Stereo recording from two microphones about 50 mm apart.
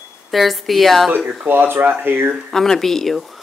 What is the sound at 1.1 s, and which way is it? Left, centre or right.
Speech, right.